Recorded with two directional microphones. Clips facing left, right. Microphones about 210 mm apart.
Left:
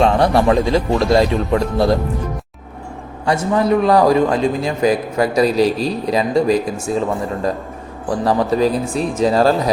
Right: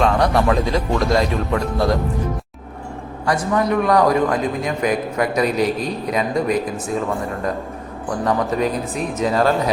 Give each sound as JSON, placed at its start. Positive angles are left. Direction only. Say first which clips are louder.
{"t": 0.0, "sound": "speech", "louder": "left 3 dB", "side_deg": 30}
{"t": 3.2, "sound": "a man's voice", "louder": "left 3 dB", "side_deg": 25}
{"t": 8.0, "sound": "a man's voice", "louder": "left 3 dB", "side_deg": 30}